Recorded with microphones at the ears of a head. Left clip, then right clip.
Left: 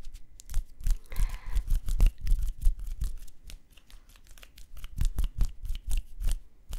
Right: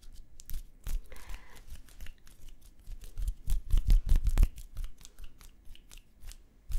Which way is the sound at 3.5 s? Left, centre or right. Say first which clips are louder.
Right 13 dB; right.